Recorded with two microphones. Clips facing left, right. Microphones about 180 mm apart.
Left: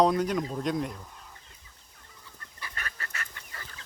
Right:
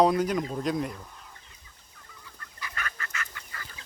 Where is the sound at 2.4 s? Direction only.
30° left (ahead or behind).